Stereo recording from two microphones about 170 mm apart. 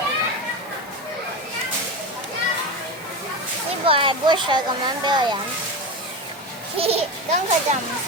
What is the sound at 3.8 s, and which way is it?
A child's voice, 30° right (ahead or behind).